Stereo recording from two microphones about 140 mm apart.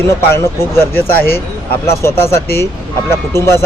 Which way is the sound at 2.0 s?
20° left (ahead or behind).